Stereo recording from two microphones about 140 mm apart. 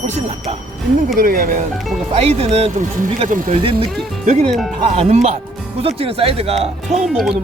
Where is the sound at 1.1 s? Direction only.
85° right.